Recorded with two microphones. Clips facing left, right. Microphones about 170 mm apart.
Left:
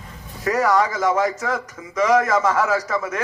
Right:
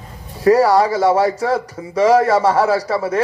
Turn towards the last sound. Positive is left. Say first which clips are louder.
# right 5 dB
turn(degrees=-30)  # may be behind; listen again after turning